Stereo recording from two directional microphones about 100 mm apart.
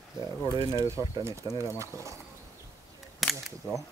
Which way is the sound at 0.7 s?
30° right (ahead or behind).